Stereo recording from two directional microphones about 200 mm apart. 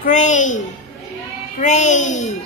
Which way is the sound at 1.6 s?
35° left (ahead or behind).